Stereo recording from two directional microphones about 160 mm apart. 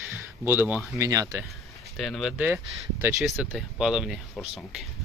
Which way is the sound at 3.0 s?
15° right (ahead or behind).